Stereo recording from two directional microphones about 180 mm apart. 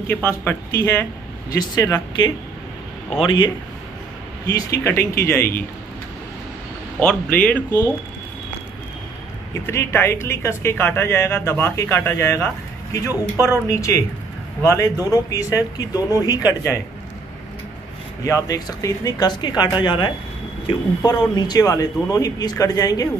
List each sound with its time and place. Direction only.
0.1 s speech: 10° left (ahead or behind); by 3.5 s 25° left (ahead or behind)
4.6 s speech: 15° left (ahead or behind)
7.0 s speech: 5° left (ahead or behind)
9.5 s speech: 15° left (ahead or behind)
13.7 s speech: 15° left (ahead or behind)
18.2 s speech: 20° left (ahead or behind)